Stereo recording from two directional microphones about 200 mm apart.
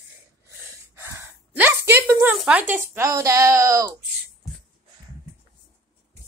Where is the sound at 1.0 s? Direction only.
15° right (ahead or behind).